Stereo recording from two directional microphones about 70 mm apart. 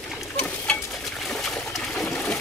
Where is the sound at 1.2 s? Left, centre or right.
Centre.